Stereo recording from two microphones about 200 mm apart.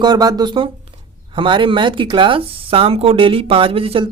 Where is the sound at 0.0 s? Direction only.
20° right (ahead or behind).